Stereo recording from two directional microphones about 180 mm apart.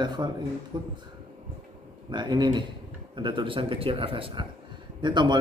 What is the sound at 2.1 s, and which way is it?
Speech, 25° right (ahead or behind).